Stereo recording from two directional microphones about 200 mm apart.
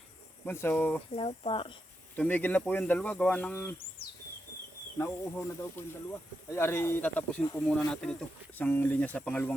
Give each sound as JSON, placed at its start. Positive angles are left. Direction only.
{"t": 0.4, "sound": "speech", "side_deg": 10}
{"t": 1.1, "sound": "speech", "side_deg": 25}
{"t": 2.1, "sound": "speech", "side_deg": 10}
{"t": 4.9, "sound": "speech", "side_deg": 10}